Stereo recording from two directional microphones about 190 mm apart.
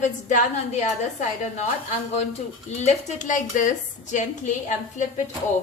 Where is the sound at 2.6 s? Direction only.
35° left (ahead or behind).